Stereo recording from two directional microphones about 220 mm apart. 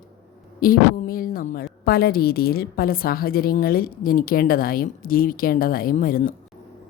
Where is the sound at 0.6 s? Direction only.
40° left (ahead or behind).